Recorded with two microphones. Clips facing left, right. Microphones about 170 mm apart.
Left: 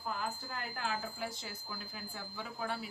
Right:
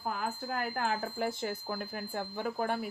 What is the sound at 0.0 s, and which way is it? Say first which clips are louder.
Speech: right 4 dB; 50° right (ahead or behind).